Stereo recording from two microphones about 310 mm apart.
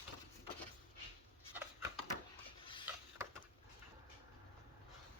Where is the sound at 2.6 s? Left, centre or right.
Centre.